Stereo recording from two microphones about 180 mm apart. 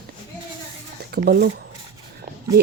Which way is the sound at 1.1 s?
60° right (ahead or behind).